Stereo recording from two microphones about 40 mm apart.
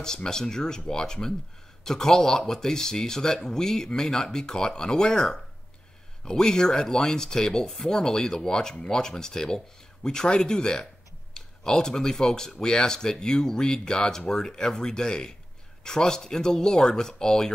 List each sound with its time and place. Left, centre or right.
0.0 s speech: centre